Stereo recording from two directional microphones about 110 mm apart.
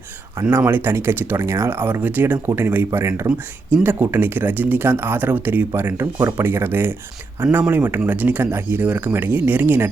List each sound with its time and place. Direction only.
0.5 s speech: 20° right (ahead or behind)